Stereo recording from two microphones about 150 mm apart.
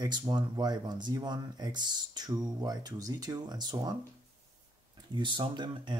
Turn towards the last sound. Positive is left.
turn(degrees=-30)  # may be behind; listen again after turning